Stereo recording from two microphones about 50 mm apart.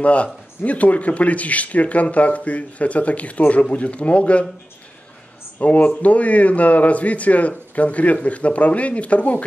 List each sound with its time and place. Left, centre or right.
0.0 s speech: left
5.6 s speech: left